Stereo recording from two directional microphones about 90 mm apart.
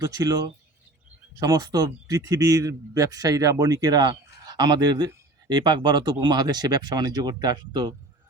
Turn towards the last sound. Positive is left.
turn(degrees=-55)  # may be behind; listen again after turning